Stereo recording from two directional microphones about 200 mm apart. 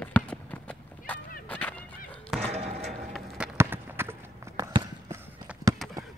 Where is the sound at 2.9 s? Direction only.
5° right (ahead or behind).